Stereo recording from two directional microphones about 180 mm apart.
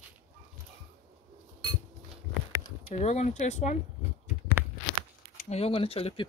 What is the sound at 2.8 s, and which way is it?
Speech, 35° left (ahead or behind).